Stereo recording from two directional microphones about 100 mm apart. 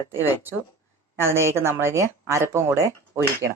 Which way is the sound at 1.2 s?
25° right (ahead or behind).